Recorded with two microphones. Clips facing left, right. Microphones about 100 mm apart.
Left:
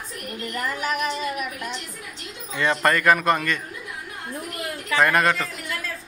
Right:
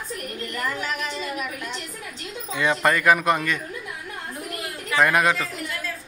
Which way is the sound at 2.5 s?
10° right (ahead or behind).